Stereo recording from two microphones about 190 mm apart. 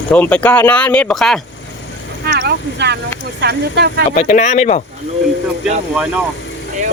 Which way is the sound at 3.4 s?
60° right (ahead or behind).